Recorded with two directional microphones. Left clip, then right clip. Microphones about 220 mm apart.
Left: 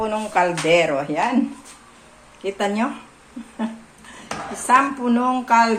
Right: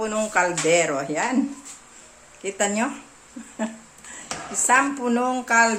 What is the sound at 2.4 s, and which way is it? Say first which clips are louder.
Speech: left 2 dB; 30° right (ahead or behind).